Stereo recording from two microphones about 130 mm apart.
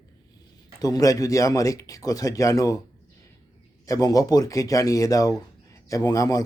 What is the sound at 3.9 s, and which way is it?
A man's voice, 30° left (ahead or behind).